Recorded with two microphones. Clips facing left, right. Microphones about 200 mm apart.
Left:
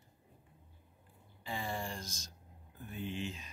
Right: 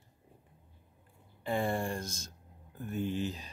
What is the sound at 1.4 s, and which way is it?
Speech, 55° right (ahead or behind).